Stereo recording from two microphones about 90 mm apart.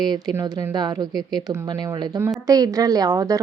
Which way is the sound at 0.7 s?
50° right (ahead or behind).